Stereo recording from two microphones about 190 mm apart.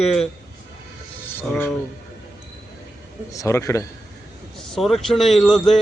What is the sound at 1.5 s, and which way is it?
Speech, 10° left (ahead or behind).